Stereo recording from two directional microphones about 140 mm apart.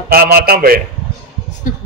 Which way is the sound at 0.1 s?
90° right.